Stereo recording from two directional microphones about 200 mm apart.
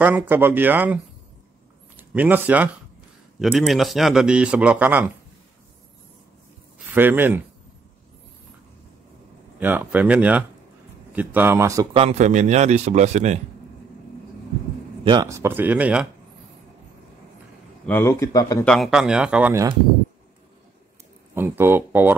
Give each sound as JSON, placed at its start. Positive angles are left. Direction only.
{"t": 0.0, "sound": "speech", "side_deg": -10}
{"t": 2.0, "sound": "a man's voice", "side_deg": -10}
{"t": 6.9, "sound": "speech", "side_deg": -10}
{"t": 9.6, "sound": "speech", "side_deg": -10}
{"t": 11.9, "sound": "a man's voice", "side_deg": -30}
{"t": 15.0, "sound": "speech", "side_deg": -20}
{"t": 17.8, "sound": "speech", "side_deg": 10}
{"t": 18.7, "sound": "speech", "side_deg": 0}
{"t": 21.4, "sound": "speech", "side_deg": -10}